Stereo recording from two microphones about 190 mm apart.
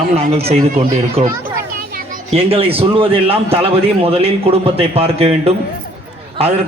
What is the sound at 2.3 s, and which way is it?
A man's voice, 30° right (ahead or behind).